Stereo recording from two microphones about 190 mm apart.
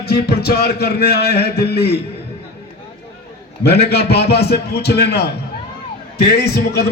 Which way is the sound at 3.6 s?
60° left (ahead or behind).